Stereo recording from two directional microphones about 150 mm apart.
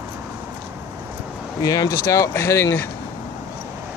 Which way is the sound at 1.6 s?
25° left (ahead or behind).